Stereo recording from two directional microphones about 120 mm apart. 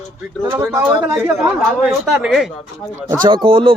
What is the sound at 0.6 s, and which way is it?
Speech, 15° right (ahead or behind).